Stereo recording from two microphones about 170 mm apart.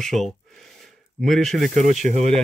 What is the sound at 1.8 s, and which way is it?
Speech, 45° right (ahead or behind).